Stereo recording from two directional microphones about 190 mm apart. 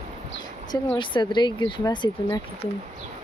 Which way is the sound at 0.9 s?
25° left (ahead or behind).